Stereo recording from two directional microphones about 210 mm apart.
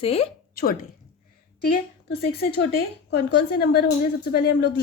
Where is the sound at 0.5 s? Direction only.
45° left (ahead or behind).